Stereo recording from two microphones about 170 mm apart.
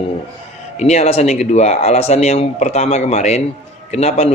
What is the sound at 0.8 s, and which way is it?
A man's voice, 40° left (ahead or behind).